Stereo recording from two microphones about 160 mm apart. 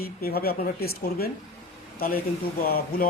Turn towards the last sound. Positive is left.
turn(degrees=65)  # may be behind; listen again after turning